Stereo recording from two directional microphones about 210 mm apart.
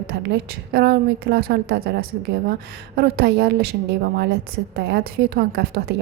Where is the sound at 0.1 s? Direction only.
50° right (ahead or behind).